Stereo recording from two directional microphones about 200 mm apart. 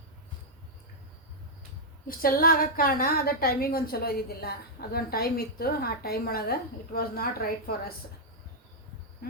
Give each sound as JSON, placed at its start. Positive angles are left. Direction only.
{"t": 2.0, "sound": "a woman's voice", "side_deg": 45}